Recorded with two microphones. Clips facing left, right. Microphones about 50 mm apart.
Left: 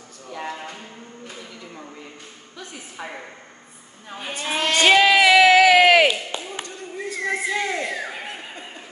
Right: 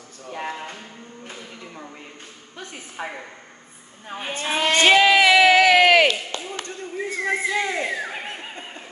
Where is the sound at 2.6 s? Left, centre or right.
Right.